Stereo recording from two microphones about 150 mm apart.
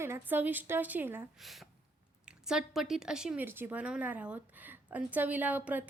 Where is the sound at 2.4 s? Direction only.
5° right (ahead or behind).